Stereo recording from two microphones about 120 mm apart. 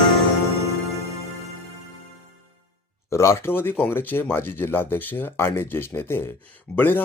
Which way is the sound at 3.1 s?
25° left (ahead or behind).